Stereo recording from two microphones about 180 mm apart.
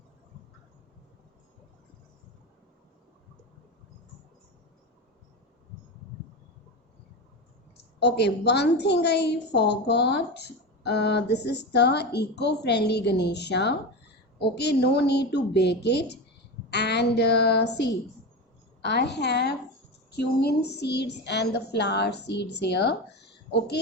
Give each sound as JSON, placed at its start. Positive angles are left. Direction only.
{"t": 7.9, "sound": "a woman's voice", "side_deg": 70}